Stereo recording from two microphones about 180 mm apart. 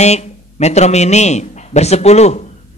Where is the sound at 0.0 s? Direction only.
40° left (ahead or behind).